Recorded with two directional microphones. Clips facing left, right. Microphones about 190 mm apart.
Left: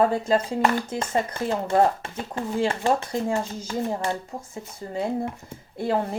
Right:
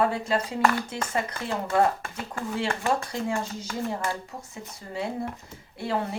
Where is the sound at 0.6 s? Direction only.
25° left (ahead or behind).